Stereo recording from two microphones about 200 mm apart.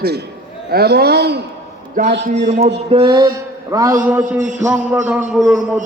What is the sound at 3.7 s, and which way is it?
A man's voice, 15° right (ahead or behind).